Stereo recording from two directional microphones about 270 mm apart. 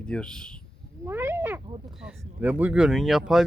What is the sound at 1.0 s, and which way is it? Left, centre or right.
Speech, centre.